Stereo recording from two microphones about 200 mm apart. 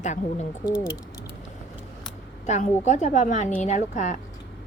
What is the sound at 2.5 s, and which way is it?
A woman's voice, 35° left (ahead or behind).